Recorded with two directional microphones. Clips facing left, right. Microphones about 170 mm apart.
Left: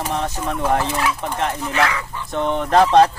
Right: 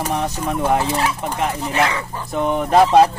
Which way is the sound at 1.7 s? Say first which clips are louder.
Right 1 dB; 30° right (ahead or behind).